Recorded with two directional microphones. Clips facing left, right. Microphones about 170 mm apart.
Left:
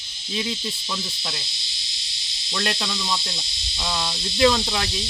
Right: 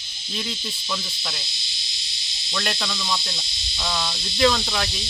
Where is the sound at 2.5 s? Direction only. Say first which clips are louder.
Left 1 dB; 20° left (ahead or behind).